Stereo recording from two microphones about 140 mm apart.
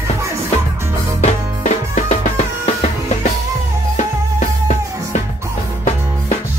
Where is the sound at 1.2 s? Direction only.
55° left (ahead or behind).